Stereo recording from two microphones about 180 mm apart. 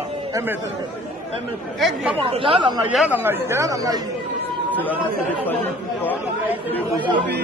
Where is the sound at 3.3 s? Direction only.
15° right (ahead or behind).